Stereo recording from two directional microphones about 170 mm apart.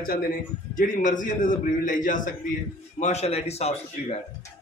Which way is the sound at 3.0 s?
40° left (ahead or behind).